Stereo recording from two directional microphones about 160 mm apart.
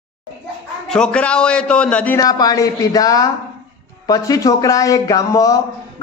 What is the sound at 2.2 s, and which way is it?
Speech, 25° left (ahead or behind).